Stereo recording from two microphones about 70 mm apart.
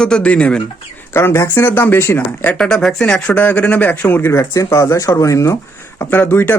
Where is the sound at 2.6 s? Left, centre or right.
Centre.